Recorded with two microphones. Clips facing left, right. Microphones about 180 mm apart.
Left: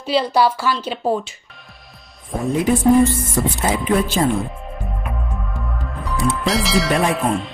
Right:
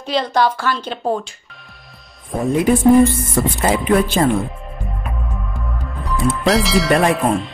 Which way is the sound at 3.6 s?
55° right (ahead or behind).